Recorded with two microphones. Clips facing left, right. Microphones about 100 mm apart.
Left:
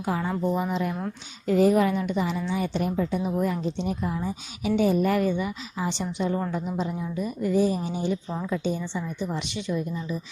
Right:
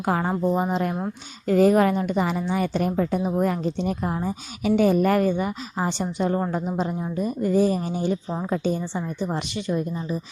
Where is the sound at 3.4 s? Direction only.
50° right (ahead or behind).